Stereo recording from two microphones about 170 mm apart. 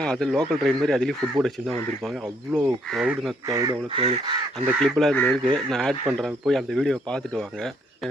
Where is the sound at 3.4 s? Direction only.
20° right (ahead or behind).